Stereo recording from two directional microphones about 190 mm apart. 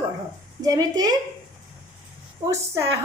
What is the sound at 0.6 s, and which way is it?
Speech, 20° right (ahead or behind).